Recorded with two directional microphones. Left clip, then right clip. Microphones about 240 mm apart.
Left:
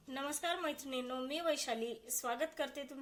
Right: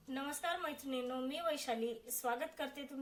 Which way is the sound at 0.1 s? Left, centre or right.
Left.